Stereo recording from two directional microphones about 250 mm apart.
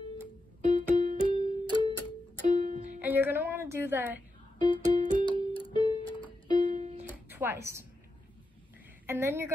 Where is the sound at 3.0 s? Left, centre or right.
Centre.